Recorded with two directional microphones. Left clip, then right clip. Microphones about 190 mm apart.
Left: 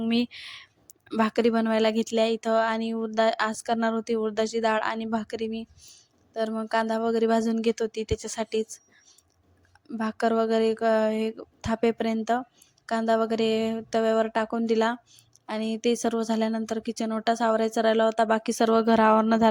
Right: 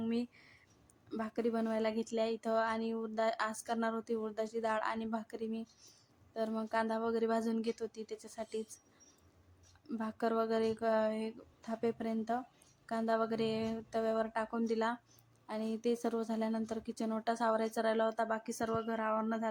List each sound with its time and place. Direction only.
0.1 s speech: 45° left (ahead or behind)
10.0 s speech: 35° left (ahead or behind)